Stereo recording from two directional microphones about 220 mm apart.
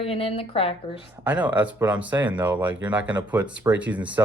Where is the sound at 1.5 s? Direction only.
5° right (ahead or behind).